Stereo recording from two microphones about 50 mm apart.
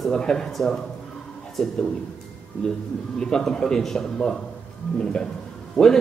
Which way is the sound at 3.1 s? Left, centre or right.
Centre.